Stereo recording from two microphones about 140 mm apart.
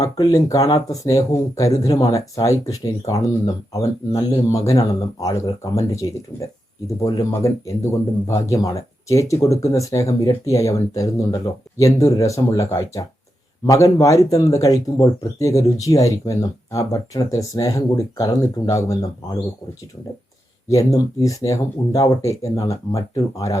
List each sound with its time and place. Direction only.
0.0 s speech: 25° left (ahead or behind)
20.7 s speech: 25° left (ahead or behind)